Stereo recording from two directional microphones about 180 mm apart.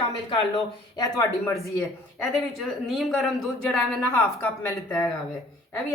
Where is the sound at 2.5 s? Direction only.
Centre (ahead or behind).